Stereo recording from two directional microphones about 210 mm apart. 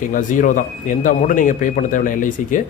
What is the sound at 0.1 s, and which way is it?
Speech, 40° left (ahead or behind).